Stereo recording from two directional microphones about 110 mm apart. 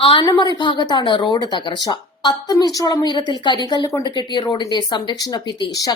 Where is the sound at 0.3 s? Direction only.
40° left (ahead or behind).